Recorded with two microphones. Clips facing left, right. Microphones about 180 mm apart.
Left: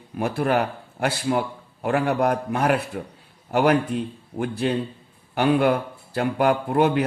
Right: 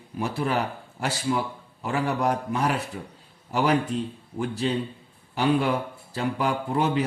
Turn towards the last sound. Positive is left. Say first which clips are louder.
# left 4 dB
turn(degrees=60)  # may be behind; listen again after turning